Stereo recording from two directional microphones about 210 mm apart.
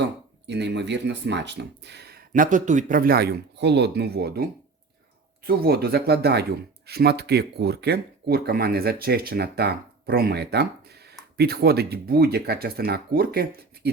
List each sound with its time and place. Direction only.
0.4 s speech: 55° right (ahead or behind)